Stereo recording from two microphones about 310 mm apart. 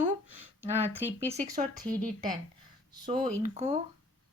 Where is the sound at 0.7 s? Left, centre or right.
Centre.